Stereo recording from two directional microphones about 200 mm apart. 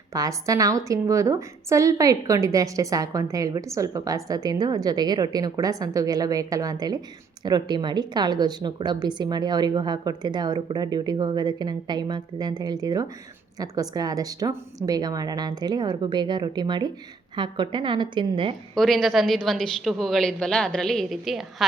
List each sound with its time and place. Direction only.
0.1 s a woman's voice: 15° right (ahead or behind)
18.7 s a woman's voice: centre (ahead or behind)